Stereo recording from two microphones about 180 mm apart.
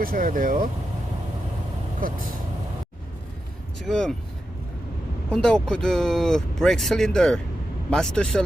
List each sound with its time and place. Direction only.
0.0 s speech: 50° right (ahead or behind)
3.8 s speech: 5° left (ahead or behind)
5.3 s speech: 5° left (ahead or behind)